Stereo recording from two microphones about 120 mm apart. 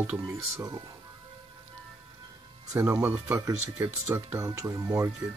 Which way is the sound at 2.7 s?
20° right (ahead or behind).